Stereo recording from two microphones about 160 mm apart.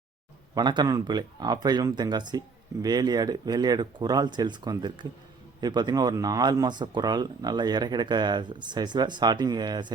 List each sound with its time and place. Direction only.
0.5 s speech: 25° right (ahead or behind)